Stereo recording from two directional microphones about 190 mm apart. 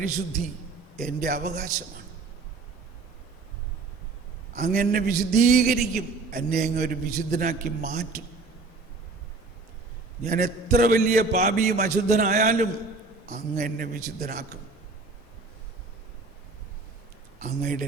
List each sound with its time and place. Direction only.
1.0 s a man's voice: 50° right (ahead or behind)
4.5 s a man's voice: 45° right (ahead or behind)
10.2 s a man's voice: 50° right (ahead or behind)
17.4 s a man's voice: 45° right (ahead or behind)